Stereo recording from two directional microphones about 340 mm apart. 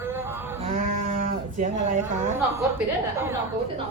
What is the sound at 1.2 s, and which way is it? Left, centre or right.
Speech, right.